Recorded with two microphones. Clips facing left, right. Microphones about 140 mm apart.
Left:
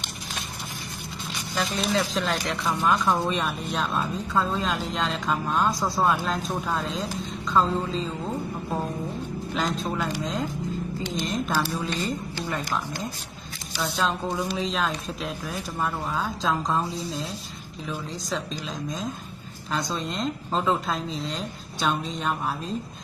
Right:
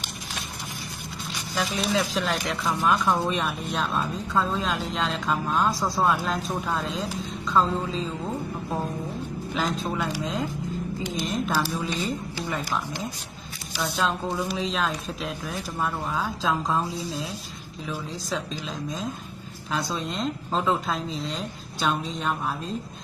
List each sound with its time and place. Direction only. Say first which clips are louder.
1.5 s a woman's voice: even; 5° right (ahead or behind)